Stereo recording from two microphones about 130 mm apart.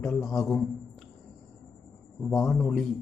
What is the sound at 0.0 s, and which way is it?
Speech, centre (ahead or behind).